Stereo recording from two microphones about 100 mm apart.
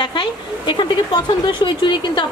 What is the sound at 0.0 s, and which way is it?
A woman's voice, 55° left (ahead or behind).